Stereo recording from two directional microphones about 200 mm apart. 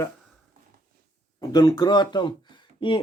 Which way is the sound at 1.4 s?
20° left (ahead or behind).